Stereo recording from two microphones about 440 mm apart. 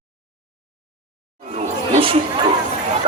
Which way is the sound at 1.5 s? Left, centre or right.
Centre.